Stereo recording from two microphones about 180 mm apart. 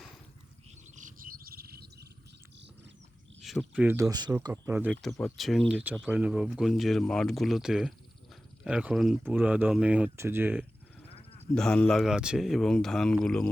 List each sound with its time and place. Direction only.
0.9 s chirp: 45° right (ahead or behind); by 2.0 s 60° right (ahead or behind)
3.4 s cricket: centre (ahead or behind)
3.8 s speech: 15° right (ahead or behind)
5.2 s speech: centre (ahead or behind)
5.8 s speech: 10° right (ahead or behind)
11.1 s sheep: 35° left (ahead or behind)
11.5 s speech: 5° left (ahead or behind)